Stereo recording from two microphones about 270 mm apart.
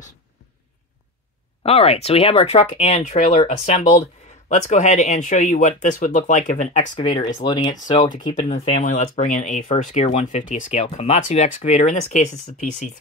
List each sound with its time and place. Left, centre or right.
1.6 s speech: left
7.9 s speech: left